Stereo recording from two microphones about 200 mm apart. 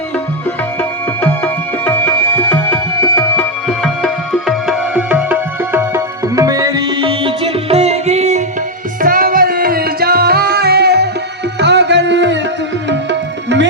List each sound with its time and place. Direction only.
1.8 s music: 10° left (ahead or behind); by 13.7 s 60° right (ahead or behind)